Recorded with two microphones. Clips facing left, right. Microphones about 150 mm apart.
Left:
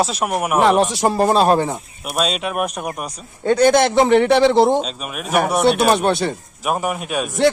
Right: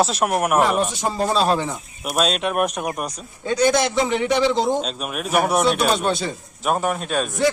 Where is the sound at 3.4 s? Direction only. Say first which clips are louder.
Left 5 dB; 60° left (ahead or behind).